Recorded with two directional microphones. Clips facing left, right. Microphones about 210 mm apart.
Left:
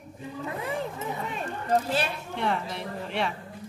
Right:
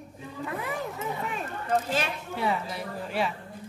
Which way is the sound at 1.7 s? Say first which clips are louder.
Left 2 dB; 35° left (ahead or behind).